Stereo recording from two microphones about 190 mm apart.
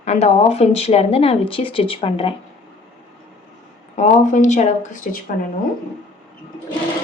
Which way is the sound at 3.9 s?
40° left (ahead or behind).